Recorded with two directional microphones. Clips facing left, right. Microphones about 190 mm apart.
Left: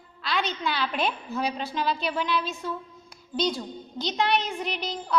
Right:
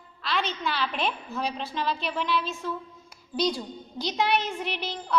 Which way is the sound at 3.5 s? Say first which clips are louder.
Left 1 dB; 10° right (ahead or behind).